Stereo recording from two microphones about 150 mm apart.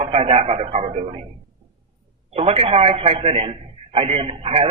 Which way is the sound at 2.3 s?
40° right (ahead or behind).